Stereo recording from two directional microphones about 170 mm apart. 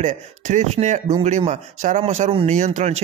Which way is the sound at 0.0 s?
45° right (ahead or behind).